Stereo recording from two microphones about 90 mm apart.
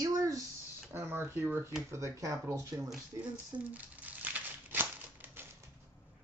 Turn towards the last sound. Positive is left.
turn(degrees=-20)  # may be behind; listen again after turning